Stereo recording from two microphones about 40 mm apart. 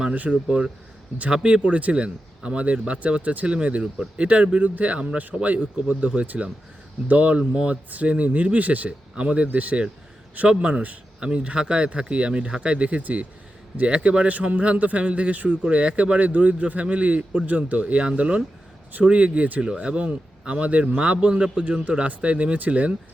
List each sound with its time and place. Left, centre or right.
0.1 s a man's voice: right
1.3 s a man's voice: right
5.0 s a man's voice: right
7.7 s a man's voice: right
8.9 s speech: right
9.5 s a man's voice: right
10.5 s speech: right
13.8 s speech: right
14.3 s a man's voice: right
19.7 s speech: right
21.6 s a man's voice: right